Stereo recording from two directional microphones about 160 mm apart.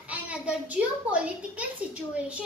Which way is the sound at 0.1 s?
10° right (ahead or behind).